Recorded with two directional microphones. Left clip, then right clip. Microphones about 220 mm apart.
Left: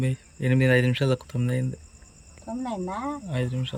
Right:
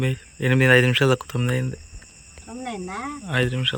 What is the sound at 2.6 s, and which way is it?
Speech, 20° left (ahead or behind).